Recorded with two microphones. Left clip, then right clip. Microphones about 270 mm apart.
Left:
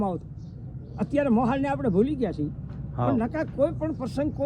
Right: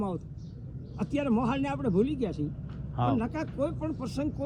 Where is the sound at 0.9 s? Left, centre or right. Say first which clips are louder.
Left 6 dB; centre.